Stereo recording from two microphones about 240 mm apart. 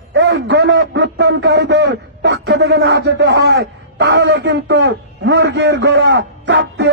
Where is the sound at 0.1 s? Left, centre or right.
Right.